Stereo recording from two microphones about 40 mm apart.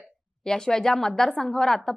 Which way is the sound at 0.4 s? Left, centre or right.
Centre.